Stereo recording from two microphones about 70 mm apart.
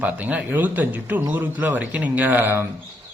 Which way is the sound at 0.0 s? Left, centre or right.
Right.